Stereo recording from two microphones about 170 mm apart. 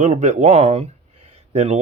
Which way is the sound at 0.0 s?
45° right (ahead or behind).